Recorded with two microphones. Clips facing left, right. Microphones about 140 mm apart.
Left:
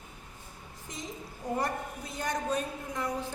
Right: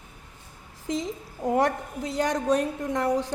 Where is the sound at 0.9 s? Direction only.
90° right.